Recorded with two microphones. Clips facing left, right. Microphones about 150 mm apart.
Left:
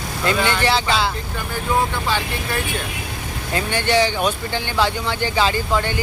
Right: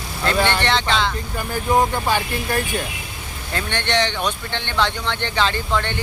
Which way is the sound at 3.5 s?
10° left (ahead or behind).